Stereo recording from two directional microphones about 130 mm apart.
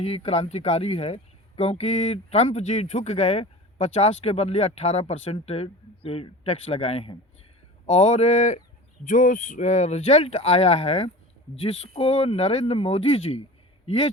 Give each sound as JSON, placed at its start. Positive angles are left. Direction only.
{"t": 0.0, "sound": "speech", "side_deg": 55}
{"t": 9.0, "sound": "a man's voice", "side_deg": 80}